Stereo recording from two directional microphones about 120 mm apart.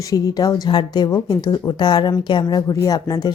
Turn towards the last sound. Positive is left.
turn(degrees=30)  # may be behind; listen again after turning